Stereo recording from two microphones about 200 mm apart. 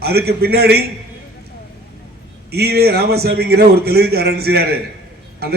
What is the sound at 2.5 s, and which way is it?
A man's voice, 50° right (ahead or behind).